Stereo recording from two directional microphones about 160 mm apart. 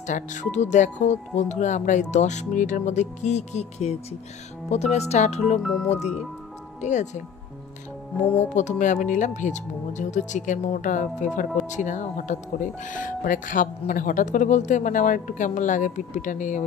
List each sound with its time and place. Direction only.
0.0 s speech: 50° left (ahead or behind)
5.6 s speech: 5° left (ahead or behind)
6.8 s speech: 50° left (ahead or behind)
8.5 s speech: 50° left (ahead or behind)